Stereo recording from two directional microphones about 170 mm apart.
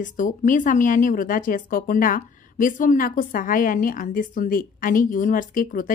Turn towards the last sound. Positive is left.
turn(degrees=55)  # may be behind; listen again after turning